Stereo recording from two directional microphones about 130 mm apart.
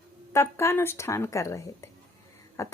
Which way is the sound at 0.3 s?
20° left (ahead or behind).